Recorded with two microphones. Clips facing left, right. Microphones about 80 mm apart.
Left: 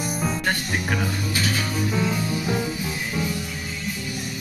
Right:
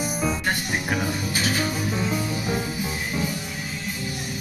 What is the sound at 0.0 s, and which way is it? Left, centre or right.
Music, centre.